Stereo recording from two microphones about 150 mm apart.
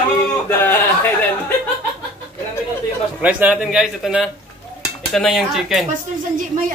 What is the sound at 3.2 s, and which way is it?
Speech, 10° right (ahead or behind).